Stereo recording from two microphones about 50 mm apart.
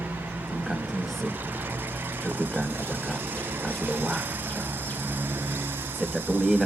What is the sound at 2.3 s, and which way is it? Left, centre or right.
Speech, right.